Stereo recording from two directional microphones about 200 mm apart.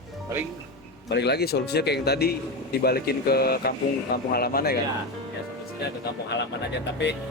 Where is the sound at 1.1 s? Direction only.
55° left (ahead or behind).